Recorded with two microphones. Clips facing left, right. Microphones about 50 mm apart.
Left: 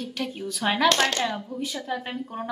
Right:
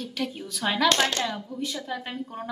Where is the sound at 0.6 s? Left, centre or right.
Centre.